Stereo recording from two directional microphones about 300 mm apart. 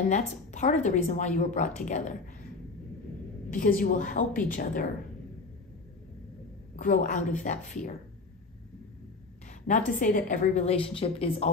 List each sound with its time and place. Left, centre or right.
0.1 s a woman's voice: left
3.4 s a woman's voice: left
6.8 s a woman's voice: left
9.7 s a woman's voice: left